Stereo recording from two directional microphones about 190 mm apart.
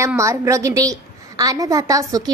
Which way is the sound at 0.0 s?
15° right (ahead or behind).